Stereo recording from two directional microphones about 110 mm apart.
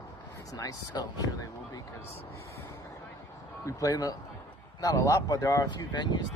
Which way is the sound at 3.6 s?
30° left (ahead or behind).